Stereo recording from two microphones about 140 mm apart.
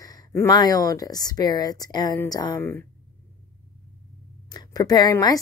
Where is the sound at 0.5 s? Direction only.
30° left (ahead or behind).